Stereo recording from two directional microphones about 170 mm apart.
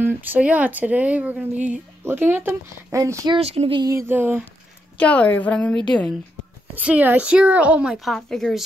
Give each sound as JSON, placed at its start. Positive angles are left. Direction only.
{"t": 0.0, "sound": "speech", "side_deg": -10}
{"t": 3.3, "sound": "speech", "side_deg": -35}
{"t": 3.9, "sound": "speech", "side_deg": -10}
{"t": 4.9, "sound": "a woman's voice", "side_deg": 10}
{"t": 6.7, "sound": "speech", "side_deg": -10}